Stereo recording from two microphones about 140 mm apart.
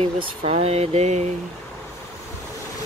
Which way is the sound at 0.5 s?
50° right (ahead or behind).